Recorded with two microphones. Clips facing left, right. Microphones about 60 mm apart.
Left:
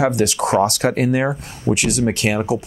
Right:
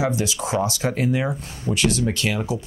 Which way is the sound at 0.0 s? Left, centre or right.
Left.